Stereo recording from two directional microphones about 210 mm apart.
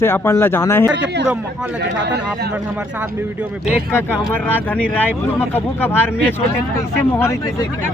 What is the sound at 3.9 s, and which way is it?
Speech, 10° left (ahead or behind).